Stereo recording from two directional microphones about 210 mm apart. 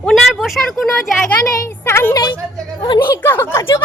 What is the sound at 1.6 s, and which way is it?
Speech, 10° left (ahead or behind).